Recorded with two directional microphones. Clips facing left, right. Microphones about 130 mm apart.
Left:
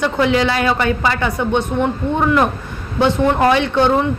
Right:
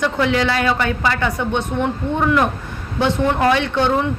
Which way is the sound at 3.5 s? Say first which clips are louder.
Left 2 dB; 10° left (ahead or behind).